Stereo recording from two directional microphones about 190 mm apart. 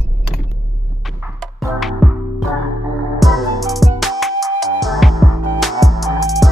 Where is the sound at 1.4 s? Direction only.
5° left (ahead or behind).